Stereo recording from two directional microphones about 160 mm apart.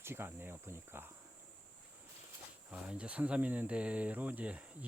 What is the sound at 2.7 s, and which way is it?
Speech, 5° right (ahead or behind).